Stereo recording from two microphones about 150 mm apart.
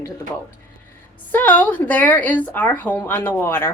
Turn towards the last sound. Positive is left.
turn(degrees=15)  # may be behind; listen again after turning